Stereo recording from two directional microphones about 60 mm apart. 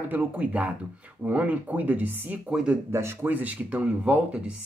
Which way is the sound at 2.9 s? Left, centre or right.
Right.